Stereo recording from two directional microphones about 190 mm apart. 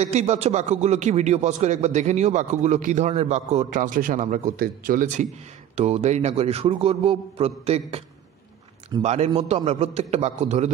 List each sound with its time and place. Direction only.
0.0 s a man's voice: 35° right (ahead or behind)
9.0 s a man's voice: 35° right (ahead or behind)